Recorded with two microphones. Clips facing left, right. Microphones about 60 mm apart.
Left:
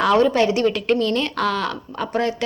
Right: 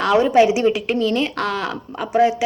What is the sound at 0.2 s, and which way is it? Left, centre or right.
A woman's voice, centre.